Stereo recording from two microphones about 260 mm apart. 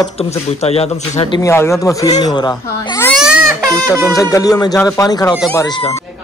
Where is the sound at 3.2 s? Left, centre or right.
Centre.